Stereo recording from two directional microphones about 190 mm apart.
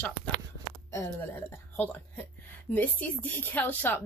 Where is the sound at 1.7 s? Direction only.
10° left (ahead or behind).